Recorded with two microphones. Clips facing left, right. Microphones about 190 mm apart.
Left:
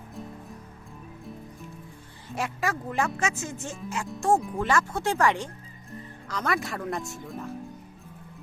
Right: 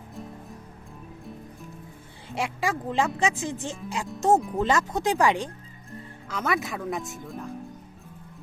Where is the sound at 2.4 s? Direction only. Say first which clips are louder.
Right 2 dB; 15° right (ahead or behind).